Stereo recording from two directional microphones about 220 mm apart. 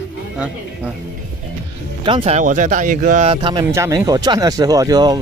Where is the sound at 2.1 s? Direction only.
25° right (ahead or behind).